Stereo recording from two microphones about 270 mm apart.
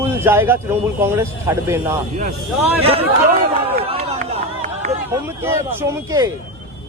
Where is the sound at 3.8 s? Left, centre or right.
Right.